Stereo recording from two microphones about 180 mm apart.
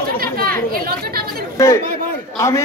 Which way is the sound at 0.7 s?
55° right (ahead or behind).